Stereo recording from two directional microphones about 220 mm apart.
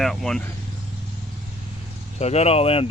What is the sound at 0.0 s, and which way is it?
Speech, centre (ahead or behind).